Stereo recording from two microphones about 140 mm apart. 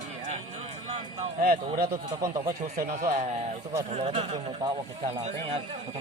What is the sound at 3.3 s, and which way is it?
A man's voice, 50° right (ahead or behind).